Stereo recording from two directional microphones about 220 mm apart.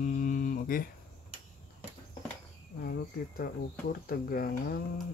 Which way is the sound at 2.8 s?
45° left (ahead or behind).